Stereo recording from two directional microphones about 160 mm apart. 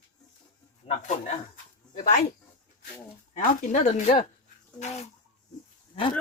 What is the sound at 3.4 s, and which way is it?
Speech, 55° left (ahead or behind).